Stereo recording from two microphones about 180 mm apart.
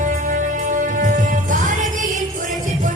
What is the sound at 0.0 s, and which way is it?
Music, 45° right (ahead or behind).